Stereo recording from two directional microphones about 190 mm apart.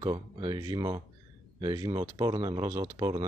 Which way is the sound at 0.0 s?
25° right (ahead or behind).